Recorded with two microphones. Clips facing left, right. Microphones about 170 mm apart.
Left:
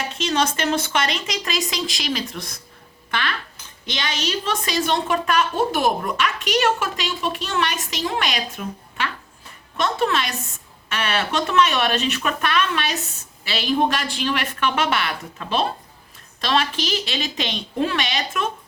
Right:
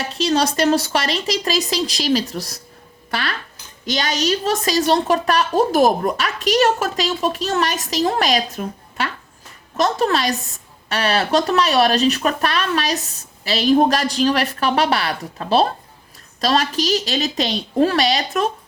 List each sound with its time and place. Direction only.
0.1 s a woman's voice: 35° right (ahead or behind)